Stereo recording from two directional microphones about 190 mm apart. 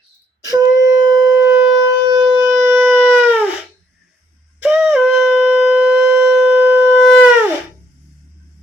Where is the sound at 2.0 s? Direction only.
20° right (ahead or behind).